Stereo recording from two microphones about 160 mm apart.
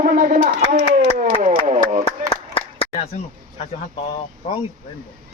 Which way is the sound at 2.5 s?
35° left (ahead or behind).